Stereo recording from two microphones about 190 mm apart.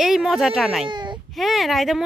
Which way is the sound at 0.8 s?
25° right (ahead or behind).